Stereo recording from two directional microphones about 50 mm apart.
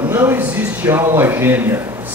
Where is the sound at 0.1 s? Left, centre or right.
Right.